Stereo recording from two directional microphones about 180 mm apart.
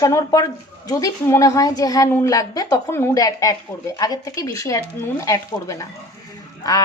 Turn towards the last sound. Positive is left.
turn(degrees=20)  # may be behind; listen again after turning